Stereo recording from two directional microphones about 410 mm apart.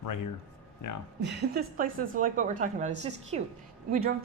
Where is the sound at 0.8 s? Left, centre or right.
Left.